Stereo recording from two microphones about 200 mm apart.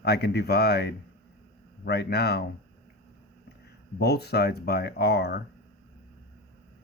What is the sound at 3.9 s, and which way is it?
Speech, 55° left (ahead or behind).